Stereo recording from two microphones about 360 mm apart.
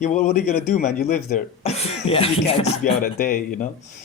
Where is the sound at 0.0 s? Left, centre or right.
Centre.